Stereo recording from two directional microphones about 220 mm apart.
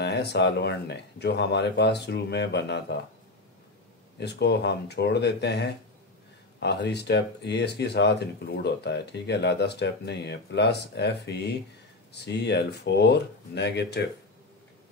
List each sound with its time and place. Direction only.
0.0 s speech: 50° left (ahead or behind)
4.2 s speech: 50° left (ahead or behind)